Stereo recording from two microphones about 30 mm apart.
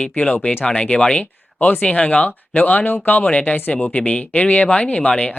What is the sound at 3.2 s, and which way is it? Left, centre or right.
Speech, left.